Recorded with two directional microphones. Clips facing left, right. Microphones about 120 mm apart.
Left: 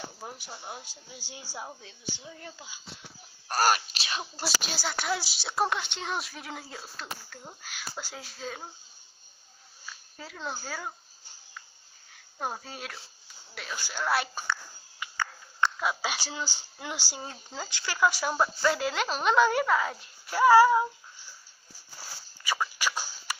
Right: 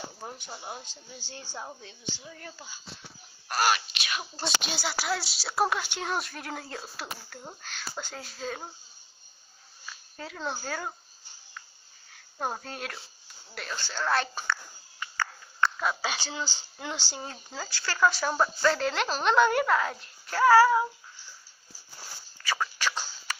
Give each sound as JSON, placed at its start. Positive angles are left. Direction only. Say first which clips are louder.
{"t": 0.2, "sound": "speech", "louder": "right 1 dB", "side_deg": 0}
{"t": 0.8, "sound": "a woman's voice", "louder": "right 1 dB", "side_deg": 10}
{"t": 1.7, "sound": "speech", "louder": "right 1 dB", "side_deg": 0}
{"t": 2.1, "sound": "speech", "louder": "even", "side_deg": 20}
{"t": 3.4, "sound": "speech", "louder": "left 1 dB", "side_deg": 40}
{"t": 4.6, "sound": "speech", "louder": "right 1 dB", "side_deg": 0}
{"t": 8.0, "sound": "speech", "louder": "right 3 dB", "side_deg": 5}
{"t": 10.1, "sound": "speech", "louder": "right 3 dB", "side_deg": 0}
{"t": 12.4, "sound": "a child's voice", "louder": "right 2 dB", "side_deg": 0}
{"t": 20.3, "sound": "a woman's voice", "louder": "left 1 dB", "side_deg": 15}
{"t": 22.4, "sound": "a sound", "louder": "even", "side_deg": 10}